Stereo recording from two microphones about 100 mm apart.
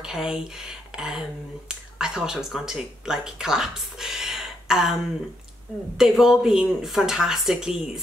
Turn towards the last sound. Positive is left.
turn(degrees=-5)  # may be behind; listen again after turning